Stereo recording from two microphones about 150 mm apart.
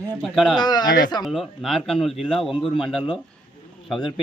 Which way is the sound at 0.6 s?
30° left (ahead or behind).